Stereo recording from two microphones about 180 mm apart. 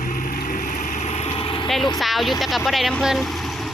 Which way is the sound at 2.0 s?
Centre (ahead or behind).